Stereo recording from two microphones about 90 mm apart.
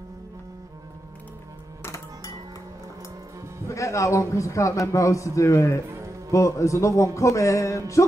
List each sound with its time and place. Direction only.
3.6 s a man's voice: 35° left (ahead or behind)